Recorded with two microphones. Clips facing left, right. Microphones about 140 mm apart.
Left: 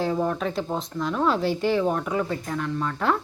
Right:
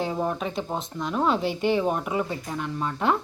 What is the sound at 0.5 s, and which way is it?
Speech, centre (ahead or behind).